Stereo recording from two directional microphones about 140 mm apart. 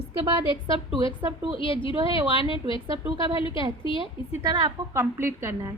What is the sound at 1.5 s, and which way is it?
A woman's voice, 40° left (ahead or behind).